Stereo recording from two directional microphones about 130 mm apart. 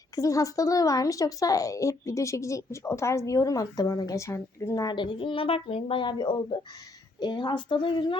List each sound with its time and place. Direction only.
0.2 s a woman's voice: 25° left (ahead or behind)